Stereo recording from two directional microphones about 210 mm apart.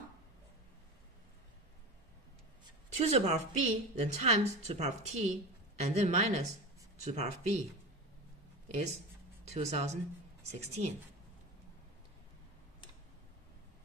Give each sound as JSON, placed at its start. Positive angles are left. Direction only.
{"t": 2.6, "sound": "a woman's voice", "side_deg": -30}
{"t": 8.7, "sound": "a woman's voice", "side_deg": -35}